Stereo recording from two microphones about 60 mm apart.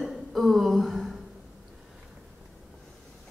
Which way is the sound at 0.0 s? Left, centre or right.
Centre.